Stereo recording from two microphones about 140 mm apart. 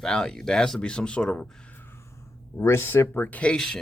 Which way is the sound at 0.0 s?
5° left (ahead or behind).